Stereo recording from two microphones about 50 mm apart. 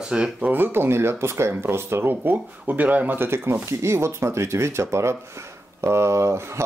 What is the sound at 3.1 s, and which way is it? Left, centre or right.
Speech, right.